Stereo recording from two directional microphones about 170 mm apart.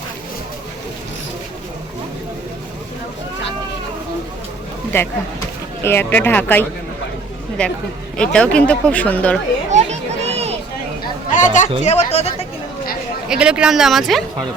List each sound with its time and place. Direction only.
4.9 s speech: 15° left (ahead or behind)
9.6 s children playing: 40° right (ahead or behind)
11.3 s chatter: 45° left (ahead or behind)
11.8 s speech: 40° left (ahead or behind)
13.2 s speech: 5° right (ahead or behind)